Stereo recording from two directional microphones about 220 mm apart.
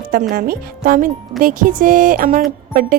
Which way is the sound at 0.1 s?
40° right (ahead or behind).